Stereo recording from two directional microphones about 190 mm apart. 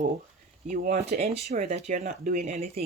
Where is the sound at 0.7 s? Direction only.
35° right (ahead or behind).